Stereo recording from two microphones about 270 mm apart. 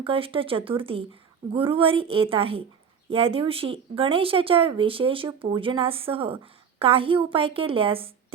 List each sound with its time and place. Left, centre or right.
0.0 s speech: centre